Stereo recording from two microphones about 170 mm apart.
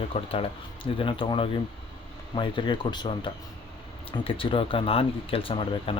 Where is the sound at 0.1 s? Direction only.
35° left (ahead or behind).